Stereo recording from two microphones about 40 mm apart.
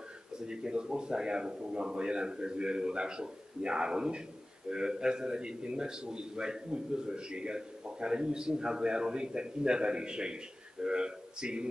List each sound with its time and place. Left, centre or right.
0.3 s a man's voice: right